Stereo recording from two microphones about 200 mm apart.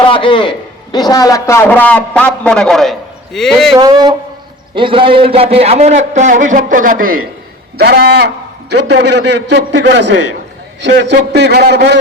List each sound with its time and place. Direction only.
0.0 s a man's voice: 25° left (ahead or behind); by 3.8 s centre (ahead or behind)
3.8 s a man's voice: 20° right (ahead or behind); by 7.3 s 45° right (ahead or behind)
7.8 s a sound: 50° right (ahead or behind)
8.9 s speech: 60° right (ahead or behind)